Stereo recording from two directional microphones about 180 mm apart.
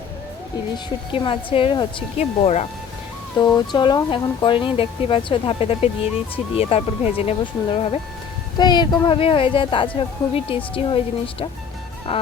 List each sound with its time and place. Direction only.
1.1 s speech: 30° left (ahead or behind)
3.3 s speech: 25° left (ahead or behind)